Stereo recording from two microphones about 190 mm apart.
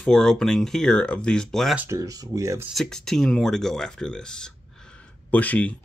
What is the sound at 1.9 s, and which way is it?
Speech, 20° right (ahead or behind).